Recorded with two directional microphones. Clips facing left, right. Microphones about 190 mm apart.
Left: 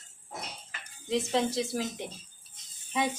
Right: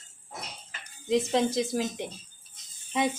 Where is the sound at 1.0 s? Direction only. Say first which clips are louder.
Right 3 dB; 15° right (ahead or behind).